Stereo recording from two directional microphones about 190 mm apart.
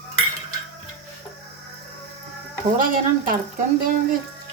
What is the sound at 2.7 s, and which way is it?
Speech, 45° right (ahead or behind).